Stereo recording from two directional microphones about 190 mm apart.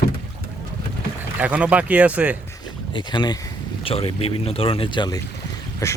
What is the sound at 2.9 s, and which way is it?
Speech, 25° left (ahead or behind).